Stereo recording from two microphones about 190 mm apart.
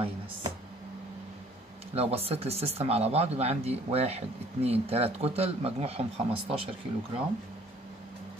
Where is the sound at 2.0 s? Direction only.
30° right (ahead or behind).